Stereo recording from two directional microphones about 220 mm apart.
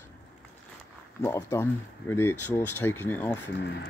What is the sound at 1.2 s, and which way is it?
Speech, 10° left (ahead or behind).